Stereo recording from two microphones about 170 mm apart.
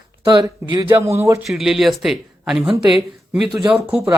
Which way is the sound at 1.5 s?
Centre (ahead or behind).